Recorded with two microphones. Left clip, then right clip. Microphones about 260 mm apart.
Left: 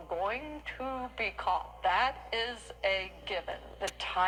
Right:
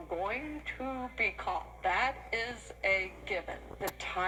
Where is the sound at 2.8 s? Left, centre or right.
Left.